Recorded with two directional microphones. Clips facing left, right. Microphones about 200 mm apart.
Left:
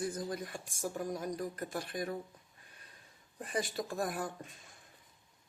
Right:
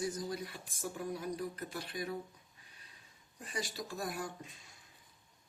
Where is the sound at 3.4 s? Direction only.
55° left (ahead or behind).